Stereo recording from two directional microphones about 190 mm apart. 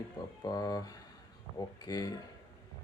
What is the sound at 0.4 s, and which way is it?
Speech, 20° left (ahead or behind).